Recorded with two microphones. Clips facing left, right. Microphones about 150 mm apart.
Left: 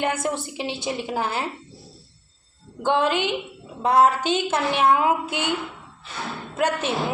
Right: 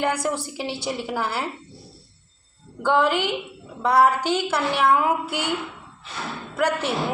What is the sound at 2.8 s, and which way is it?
A woman's voice, 20° left (ahead or behind).